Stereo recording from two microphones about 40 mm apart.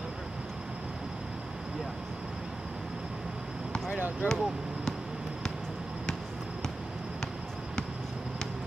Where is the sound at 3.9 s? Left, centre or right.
Right.